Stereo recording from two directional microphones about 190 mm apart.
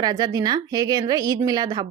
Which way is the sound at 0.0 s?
20° right (ahead or behind).